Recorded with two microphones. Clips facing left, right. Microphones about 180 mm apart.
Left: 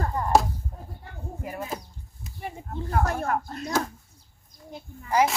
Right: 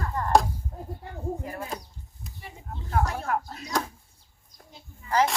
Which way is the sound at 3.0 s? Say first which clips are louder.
Left 3 dB; 50° left (ahead or behind).